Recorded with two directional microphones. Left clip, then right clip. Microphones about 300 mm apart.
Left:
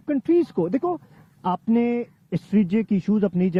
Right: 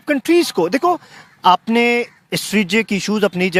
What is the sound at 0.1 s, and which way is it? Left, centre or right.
Speech, centre.